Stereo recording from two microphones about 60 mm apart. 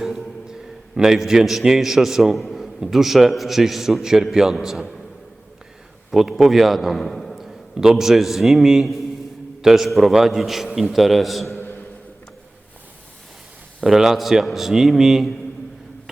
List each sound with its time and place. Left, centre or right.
0.0 s a man's voice: centre
6.1 s a man's voice: centre
11.5 s a sound: left
13.8 s a man's voice: centre